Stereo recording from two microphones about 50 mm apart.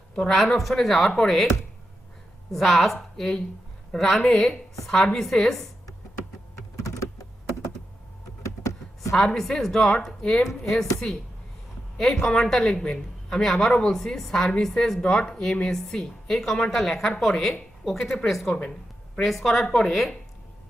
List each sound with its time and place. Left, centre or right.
0.2 s speech: centre
2.5 s a woman's voice: centre
8.4 s a sound: left
9.1 s a woman's voice: centre
11.9 s a woman's voice: centre
12.7 s a woman's voice: left
13.4 s a woman's voice: centre
18.0 s speech: left
18.3 s speech: centre